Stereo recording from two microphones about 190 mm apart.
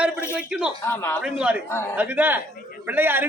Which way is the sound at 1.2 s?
5° right (ahead or behind).